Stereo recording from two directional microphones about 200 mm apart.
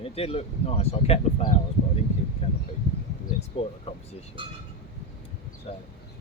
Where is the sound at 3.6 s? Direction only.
30° left (ahead or behind).